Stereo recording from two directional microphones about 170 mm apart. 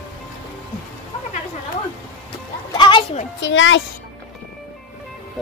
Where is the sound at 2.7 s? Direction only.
30° left (ahead or behind).